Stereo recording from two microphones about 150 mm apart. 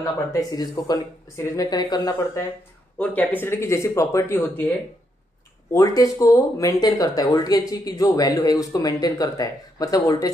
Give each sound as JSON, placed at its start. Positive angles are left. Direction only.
{"t": 0.0, "sound": "speech", "side_deg": 20}
{"t": 3.0, "sound": "speech", "side_deg": 10}